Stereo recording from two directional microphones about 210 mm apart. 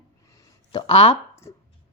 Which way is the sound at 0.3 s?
15° left (ahead or behind).